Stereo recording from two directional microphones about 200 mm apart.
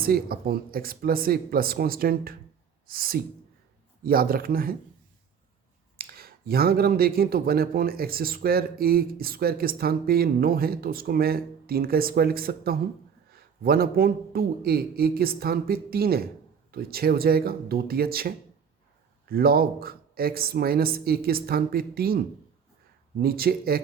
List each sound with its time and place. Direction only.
0.0 s speech: 50° right (ahead or behind)
6.0 s speech: 50° right (ahead or behind)
23.2 s speech: 50° right (ahead or behind)